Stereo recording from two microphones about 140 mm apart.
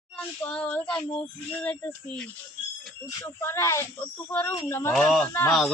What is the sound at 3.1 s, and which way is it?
Speech, 20° left (ahead or behind).